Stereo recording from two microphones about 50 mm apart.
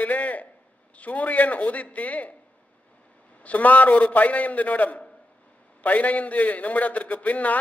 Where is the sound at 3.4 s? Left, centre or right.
Left.